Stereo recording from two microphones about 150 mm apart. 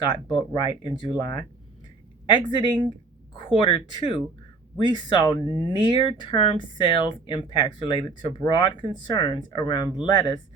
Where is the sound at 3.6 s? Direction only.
30° left (ahead or behind).